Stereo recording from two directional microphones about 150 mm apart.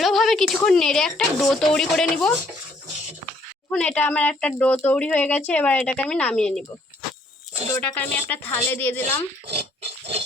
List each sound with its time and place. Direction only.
0.0 s speech: centre (ahead or behind)
3.7 s speech: 5° left (ahead or behind)
7.7 s speech: 10° left (ahead or behind)
9.5 s pig: 40° right (ahead or behind)